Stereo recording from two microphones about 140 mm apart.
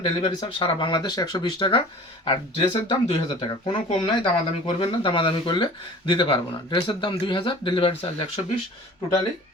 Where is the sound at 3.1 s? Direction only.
40° left (ahead or behind).